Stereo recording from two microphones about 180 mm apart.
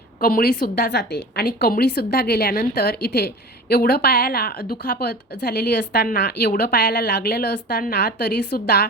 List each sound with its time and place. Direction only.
0.2 s a woman's voice: 55° left (ahead or behind)